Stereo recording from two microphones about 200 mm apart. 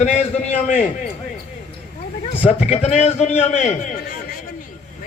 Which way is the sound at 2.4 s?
30° left (ahead or behind).